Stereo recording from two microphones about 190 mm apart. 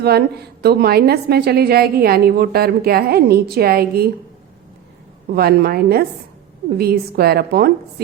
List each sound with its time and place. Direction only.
0.0 s a woman's voice: 55° right (ahead or behind)
5.3 s a woman's voice: 55° right (ahead or behind)